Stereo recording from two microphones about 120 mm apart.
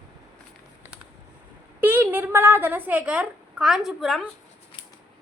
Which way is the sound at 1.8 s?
20° right (ahead or behind).